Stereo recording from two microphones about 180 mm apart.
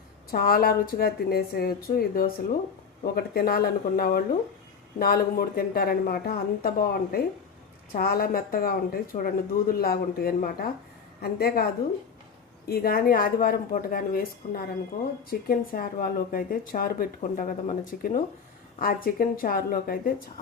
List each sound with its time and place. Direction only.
0.3 s speech: 55° left (ahead or behind)